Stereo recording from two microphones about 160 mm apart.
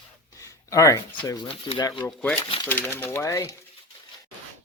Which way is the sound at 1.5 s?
30° left (ahead or behind).